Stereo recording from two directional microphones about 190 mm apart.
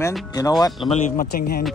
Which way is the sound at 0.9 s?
50° left (ahead or behind).